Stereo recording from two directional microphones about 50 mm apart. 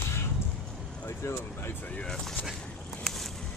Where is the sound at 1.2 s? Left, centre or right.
Left.